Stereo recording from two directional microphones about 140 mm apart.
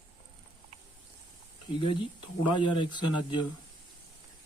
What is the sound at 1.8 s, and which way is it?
Speech, 35° left (ahead or behind).